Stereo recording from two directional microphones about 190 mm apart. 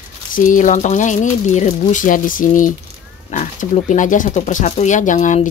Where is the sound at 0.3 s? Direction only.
45° left (ahead or behind).